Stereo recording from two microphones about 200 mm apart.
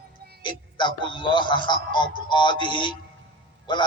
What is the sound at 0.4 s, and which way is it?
A man's voice, 25° left (ahead or behind).